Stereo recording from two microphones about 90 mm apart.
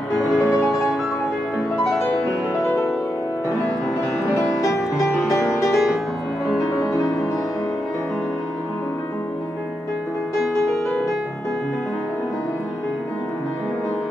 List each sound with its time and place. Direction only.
0.3 s music: centre (ahead or behind)
4.4 s music: 35° left (ahead or behind)
5.7 s music: centre (ahead or behind)